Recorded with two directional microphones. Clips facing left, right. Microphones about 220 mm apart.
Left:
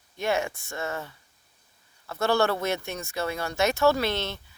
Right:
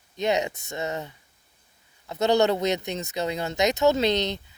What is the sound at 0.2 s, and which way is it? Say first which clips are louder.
Speech: right 2 dB; 20° right (ahead or behind).